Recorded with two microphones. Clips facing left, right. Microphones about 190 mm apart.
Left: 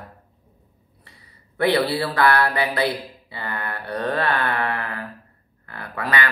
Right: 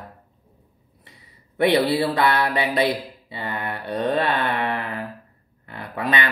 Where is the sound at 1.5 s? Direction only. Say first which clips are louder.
Right 2 dB; 20° right (ahead or behind).